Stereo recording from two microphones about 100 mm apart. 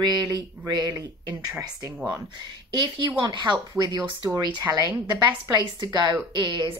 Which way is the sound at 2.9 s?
65° right (ahead or behind).